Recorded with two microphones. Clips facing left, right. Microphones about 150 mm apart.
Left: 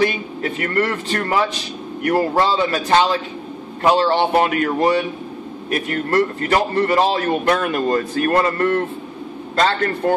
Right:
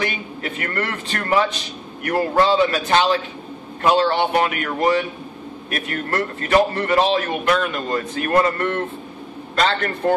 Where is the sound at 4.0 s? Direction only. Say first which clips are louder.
Left 2 dB; 35° left (ahead or behind).